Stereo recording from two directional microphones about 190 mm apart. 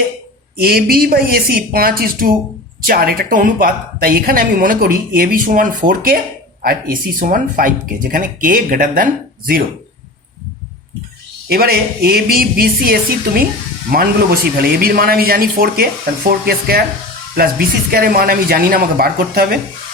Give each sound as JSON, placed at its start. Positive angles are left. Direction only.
{"t": 0.6, "sound": "speech", "side_deg": -55}
{"t": 11.4, "sound": "speech", "side_deg": -55}